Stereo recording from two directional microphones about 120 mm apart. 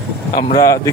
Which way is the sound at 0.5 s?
25° left (ahead or behind).